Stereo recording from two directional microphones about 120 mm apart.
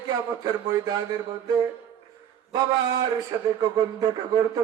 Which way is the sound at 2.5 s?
35° right (ahead or behind).